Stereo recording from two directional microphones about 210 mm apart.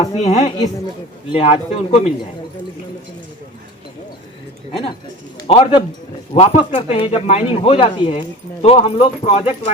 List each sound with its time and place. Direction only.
0.0 s speech: 30° left (ahead or behind)
5.5 s speech: 30° left (ahead or behind)